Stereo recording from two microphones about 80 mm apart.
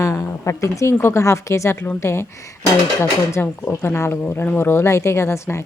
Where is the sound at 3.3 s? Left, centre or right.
Left.